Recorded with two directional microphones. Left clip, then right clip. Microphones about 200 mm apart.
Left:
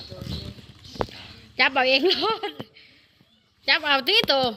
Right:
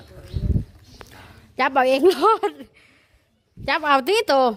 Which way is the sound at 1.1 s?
40° right (ahead or behind).